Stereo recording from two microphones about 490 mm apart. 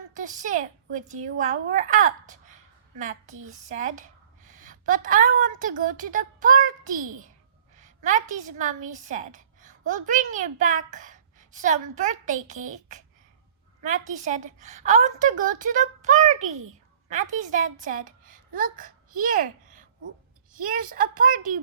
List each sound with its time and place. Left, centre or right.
0.1 s a woman's voice: centre